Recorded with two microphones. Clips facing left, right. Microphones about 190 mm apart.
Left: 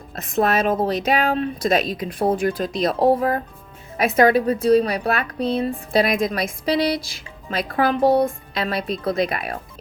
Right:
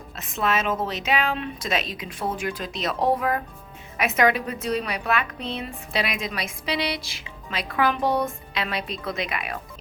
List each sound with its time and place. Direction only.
0.2 s a woman's voice: 40° left (ahead or behind)
7.8 s a woman's voice: 35° left (ahead or behind)